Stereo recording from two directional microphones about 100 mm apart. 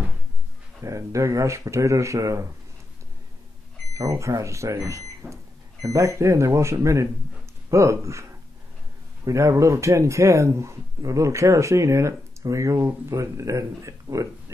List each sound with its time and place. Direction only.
0.8 s speech: 30° right (ahead or behind)
3.9 s speech: 30° right (ahead or behind)